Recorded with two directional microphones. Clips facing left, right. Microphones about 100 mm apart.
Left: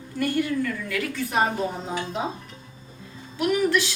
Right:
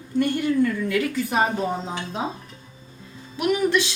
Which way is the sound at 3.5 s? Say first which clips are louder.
Right 1 dB; 20° right (ahead or behind).